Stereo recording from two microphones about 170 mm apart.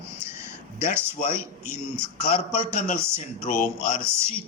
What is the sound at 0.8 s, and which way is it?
Speech, 15° right (ahead or behind).